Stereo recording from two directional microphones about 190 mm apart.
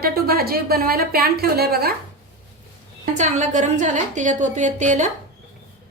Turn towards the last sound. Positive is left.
turn(degrees=-40)  # may be behind; listen again after turning